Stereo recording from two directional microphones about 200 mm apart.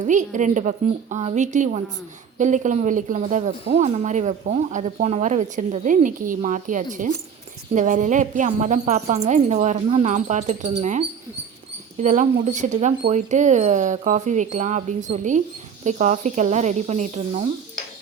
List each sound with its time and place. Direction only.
0.1 s speech: 40° right (ahead or behind)